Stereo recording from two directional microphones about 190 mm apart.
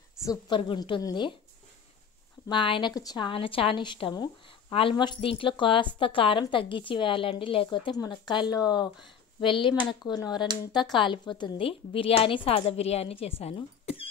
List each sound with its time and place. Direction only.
0.2 s a woman's voice: 20° left (ahead or behind)
2.4 s a woman's voice: 25° left (ahead or behind)